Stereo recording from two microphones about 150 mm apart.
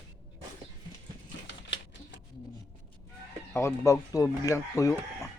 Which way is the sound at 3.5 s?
20° left (ahead or behind).